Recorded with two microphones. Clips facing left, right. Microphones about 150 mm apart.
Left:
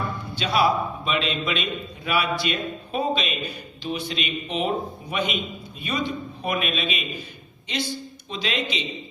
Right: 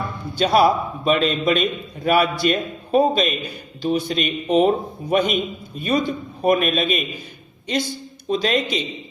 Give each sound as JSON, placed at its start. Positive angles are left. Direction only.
{"t": 0.3, "sound": "a man's voice", "side_deg": -45}
{"t": 8.3, "sound": "a man's voice", "side_deg": -45}